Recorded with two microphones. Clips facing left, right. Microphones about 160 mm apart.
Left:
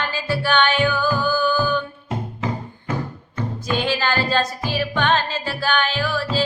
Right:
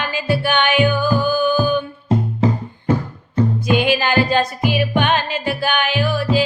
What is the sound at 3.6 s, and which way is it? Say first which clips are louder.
Music: right 2 dB; 15° right (ahead or behind).